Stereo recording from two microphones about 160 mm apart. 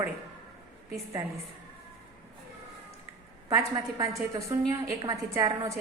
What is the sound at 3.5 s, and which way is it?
A woman's voice, 20° right (ahead or behind).